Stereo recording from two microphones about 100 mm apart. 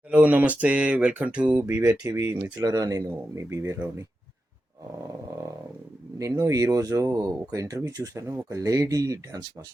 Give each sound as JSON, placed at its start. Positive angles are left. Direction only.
{"t": 0.1, "sound": "speech", "side_deg": -15}
{"t": 2.6, "sound": "speech", "side_deg": -35}
{"t": 6.1, "sound": "speech", "side_deg": -35}